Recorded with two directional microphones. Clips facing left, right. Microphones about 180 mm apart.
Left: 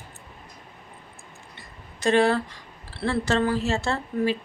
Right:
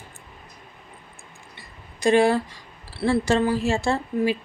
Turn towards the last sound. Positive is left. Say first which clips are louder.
# right 2 dB
turn(degrees=-10)  # may be behind; listen again after turning